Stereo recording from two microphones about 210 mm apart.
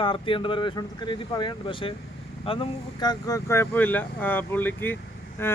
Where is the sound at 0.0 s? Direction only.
25° left (ahead or behind).